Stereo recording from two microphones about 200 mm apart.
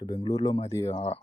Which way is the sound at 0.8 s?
30° left (ahead or behind).